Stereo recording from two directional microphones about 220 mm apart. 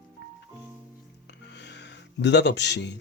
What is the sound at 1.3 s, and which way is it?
Music, 50° left (ahead or behind).